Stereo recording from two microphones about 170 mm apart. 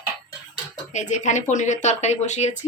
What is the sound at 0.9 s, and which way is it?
Speech, 45° left (ahead or behind).